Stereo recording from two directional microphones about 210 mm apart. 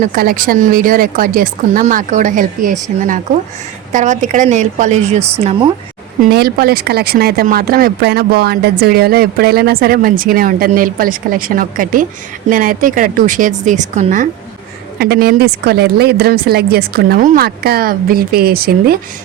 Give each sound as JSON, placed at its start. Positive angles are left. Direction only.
{"t": 0.1, "sound": "a woman's voice", "side_deg": -40}
{"t": 3.9, "sound": "a woman's voice", "side_deg": -35}
{"t": 6.3, "sound": "a woman's voice", "side_deg": -50}
{"t": 14.9, "sound": "speech", "side_deg": -50}